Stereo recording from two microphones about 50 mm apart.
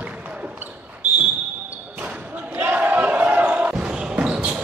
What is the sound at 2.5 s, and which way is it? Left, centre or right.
Basketball bounce, right.